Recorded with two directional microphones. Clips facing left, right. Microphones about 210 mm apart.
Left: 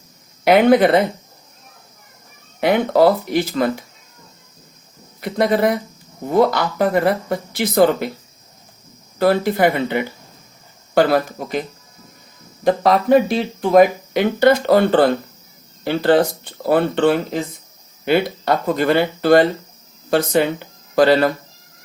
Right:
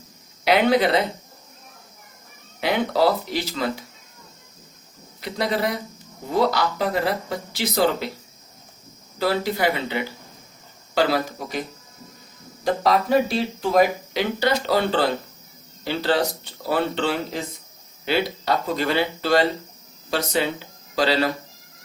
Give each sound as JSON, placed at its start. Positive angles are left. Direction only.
{"t": 0.4, "sound": "speech", "side_deg": 50}
{"t": 2.6, "sound": "speech", "side_deg": 55}
{"t": 5.2, "sound": "speech", "side_deg": 55}
{"t": 9.1, "sound": "speech", "side_deg": 55}
{"t": 12.6, "sound": "speech", "side_deg": 55}